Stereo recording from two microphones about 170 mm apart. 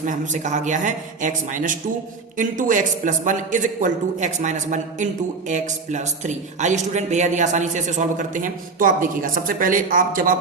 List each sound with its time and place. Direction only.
0.0 s speech: 50° right (ahead or behind)